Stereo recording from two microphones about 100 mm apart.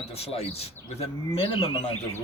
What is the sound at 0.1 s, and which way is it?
Speech, 85° left.